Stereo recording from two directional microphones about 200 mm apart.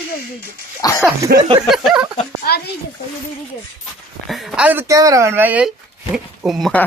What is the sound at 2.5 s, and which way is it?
Speech, 50° left (ahead or behind).